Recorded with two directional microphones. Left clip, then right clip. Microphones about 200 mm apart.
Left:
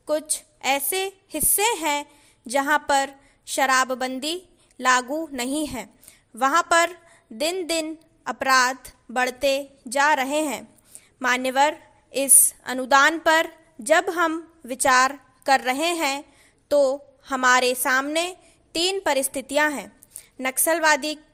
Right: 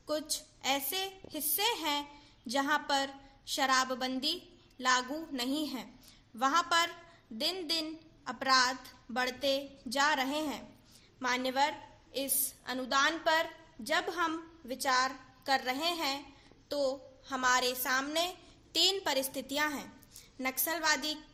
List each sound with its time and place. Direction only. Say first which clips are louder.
0.0 s a woman's voice: left 10 dB; 45° left (ahead or behind)